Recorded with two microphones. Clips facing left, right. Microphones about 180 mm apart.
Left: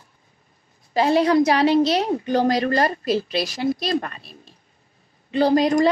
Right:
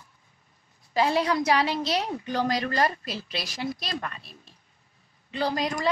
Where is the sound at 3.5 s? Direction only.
55° left (ahead or behind).